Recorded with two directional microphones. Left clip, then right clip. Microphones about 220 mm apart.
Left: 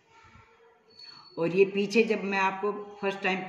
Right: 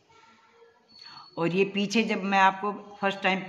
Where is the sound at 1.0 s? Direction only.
50° right (ahead or behind).